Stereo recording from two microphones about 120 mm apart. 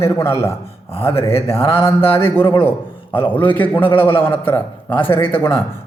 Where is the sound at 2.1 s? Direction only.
20° left (ahead or behind).